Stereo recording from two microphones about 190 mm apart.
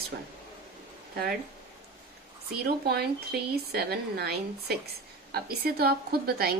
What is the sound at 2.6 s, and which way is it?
A woman's voice, 55° right (ahead or behind).